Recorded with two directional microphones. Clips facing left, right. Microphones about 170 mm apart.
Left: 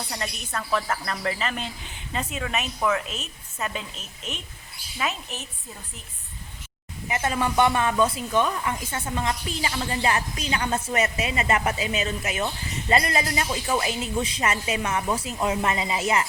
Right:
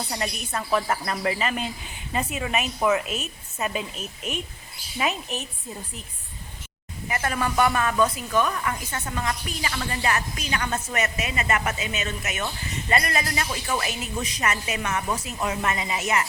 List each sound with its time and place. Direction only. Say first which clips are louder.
0.1 s a woman's voice: right 2 dB; 10° right (ahead or behind)
7.1 s a woman's voice: left 1 dB; 20° left (ahead or behind)